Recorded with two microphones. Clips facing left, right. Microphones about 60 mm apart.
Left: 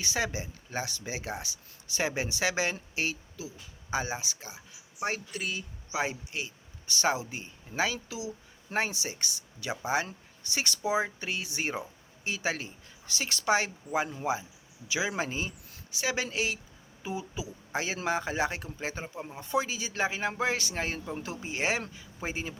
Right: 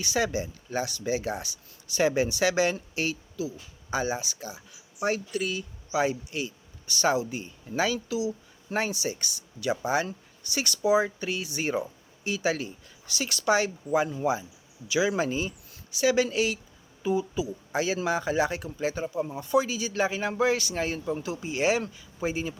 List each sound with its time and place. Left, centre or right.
0.0 s speech: left